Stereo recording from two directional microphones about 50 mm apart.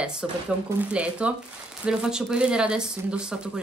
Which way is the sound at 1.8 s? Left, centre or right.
Centre.